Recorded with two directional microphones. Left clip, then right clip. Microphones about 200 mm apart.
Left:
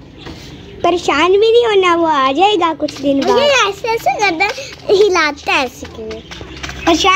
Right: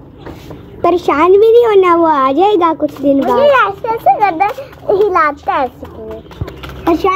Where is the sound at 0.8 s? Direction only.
5° right (ahead or behind).